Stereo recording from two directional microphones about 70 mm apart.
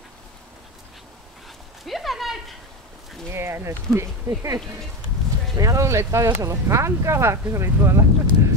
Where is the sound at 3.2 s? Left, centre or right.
Right.